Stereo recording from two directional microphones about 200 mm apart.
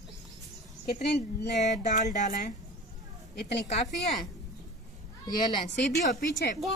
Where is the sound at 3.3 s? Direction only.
55° left (ahead or behind).